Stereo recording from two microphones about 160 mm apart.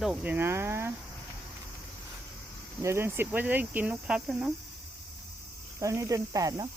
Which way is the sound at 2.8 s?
15° right (ahead or behind).